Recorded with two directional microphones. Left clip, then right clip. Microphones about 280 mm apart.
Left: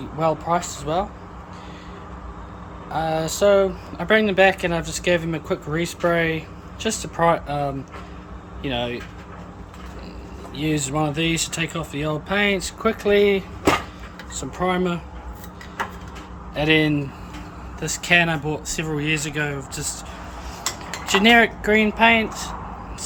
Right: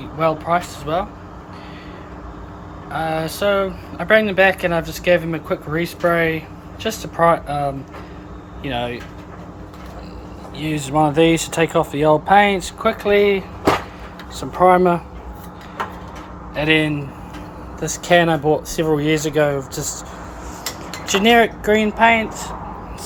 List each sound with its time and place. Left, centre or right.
0.2 s speech: centre
2.9 s speech: centre
10.6 s speech: left
10.8 s speech: centre
16.6 s speech: centre
17.7 s speech: centre
21.1 s speech: centre